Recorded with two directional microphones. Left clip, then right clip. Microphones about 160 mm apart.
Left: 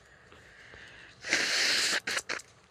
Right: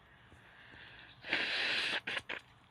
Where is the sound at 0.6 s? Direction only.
40° left (ahead or behind).